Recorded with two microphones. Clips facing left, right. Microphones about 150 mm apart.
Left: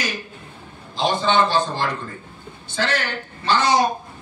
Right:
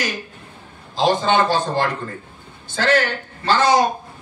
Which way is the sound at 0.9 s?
45° right (ahead or behind).